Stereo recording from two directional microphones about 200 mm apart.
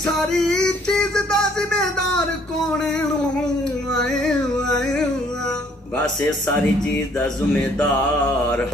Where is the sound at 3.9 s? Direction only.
5° left (ahead or behind).